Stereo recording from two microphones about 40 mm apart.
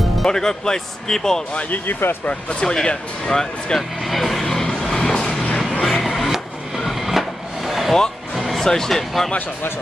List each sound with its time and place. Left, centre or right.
0.2 s speech: centre
1.7 s speech: left
2.6 s speech: centre
4.0 s speech: centre
4.4 s vehicle: centre
5.6 s printer: centre
8.4 s music: centre
8.6 s speech: centre